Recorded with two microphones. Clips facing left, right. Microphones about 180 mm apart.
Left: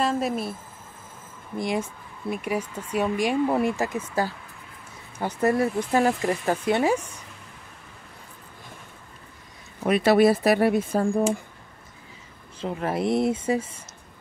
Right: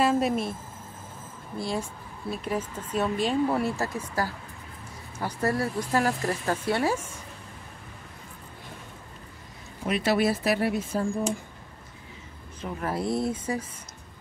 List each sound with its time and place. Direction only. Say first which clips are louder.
0.0 s a woman's voice: right 1 dB; centre (ahead or behind)
1.6 s speech: left 4 dB; 20° left (ahead or behind)
9.8 s speech: left 6 dB; 50° left (ahead or behind)
12.5 s speech: left 4 dB; 25° left (ahead or behind)